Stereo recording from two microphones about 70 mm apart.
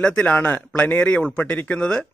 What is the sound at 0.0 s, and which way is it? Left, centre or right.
A man's voice, centre.